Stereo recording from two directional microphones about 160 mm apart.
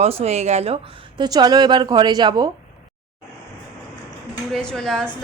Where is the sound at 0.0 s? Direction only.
40° right (ahead or behind).